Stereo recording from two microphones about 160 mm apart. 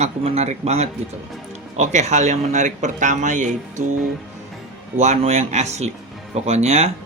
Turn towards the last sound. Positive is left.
turn(degrees=-45)  # may be behind; listen again after turning